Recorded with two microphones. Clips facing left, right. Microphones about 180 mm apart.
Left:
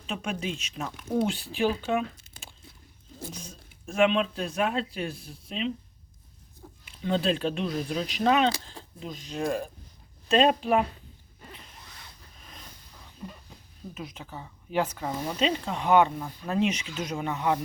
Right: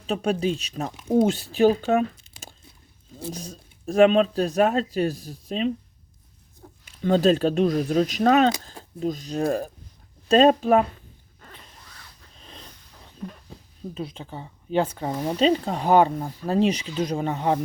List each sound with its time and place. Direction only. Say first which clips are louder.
0.1 s speech: right 9 dB; 35° right (ahead or behind)
0.9 s speech: right 5 dB; 20° right (ahead or behind)
1.2 s speech: right 8 dB; 45° right (ahead or behind)
6.8 s speech: right 8 dB; 40° right (ahead or behind)
12.4 s a sound: right 4 dB; 30° right (ahead or behind)
13.9 s speech: right 6 dB; 30° right (ahead or behind)